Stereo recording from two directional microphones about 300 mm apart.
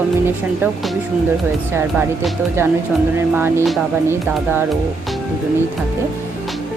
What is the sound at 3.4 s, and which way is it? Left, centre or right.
Speech, centre.